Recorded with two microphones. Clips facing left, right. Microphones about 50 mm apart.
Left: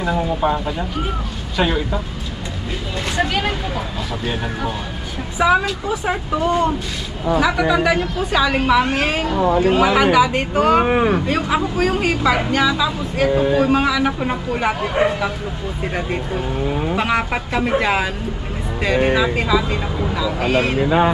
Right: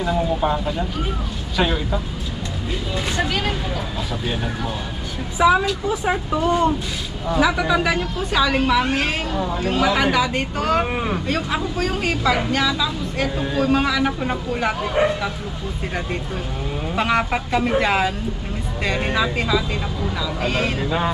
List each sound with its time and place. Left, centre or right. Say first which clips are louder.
0.0 s a man's voice: left 1 dB; centre
3.2 s a man's voice: left 4 dB; centre
7.3 s a woman's voice: left 2 dB; centre
9.4 s speech: left 8 dB; left
9.6 s a man's voice: left 1 dB; centre
10.8 s speech: left 7 dB; left
11.3 s a man's voice: left 4 dB; centre
16.9 s a woman's voice: right 2 dB; centre
20.8 s speech: left 6 dB; left